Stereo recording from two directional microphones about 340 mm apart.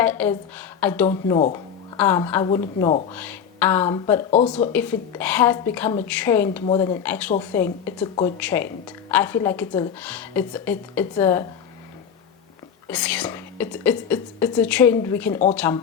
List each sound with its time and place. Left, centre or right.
0.0 s speech: centre
3.1 s speech: centre
4.7 s speech: centre
12.9 s speech: centre